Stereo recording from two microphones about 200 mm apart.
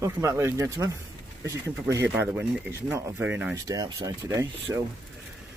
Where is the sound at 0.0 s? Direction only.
15° right (ahead or behind).